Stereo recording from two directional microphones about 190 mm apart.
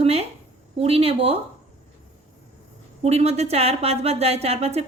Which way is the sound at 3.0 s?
35° right (ahead or behind).